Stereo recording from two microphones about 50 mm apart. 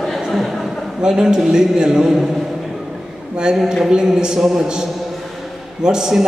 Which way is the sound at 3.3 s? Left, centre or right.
Centre.